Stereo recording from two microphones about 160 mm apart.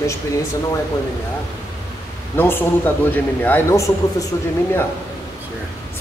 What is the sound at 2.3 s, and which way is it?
Speech, 15° left (ahead or behind).